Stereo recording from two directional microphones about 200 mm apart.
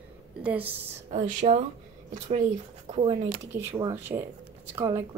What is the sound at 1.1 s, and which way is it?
Speech, 35° right (ahead or behind).